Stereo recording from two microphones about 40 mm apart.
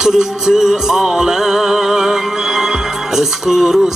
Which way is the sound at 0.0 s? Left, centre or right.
Centre.